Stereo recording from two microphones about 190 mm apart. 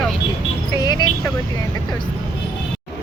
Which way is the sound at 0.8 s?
20° left (ahead or behind).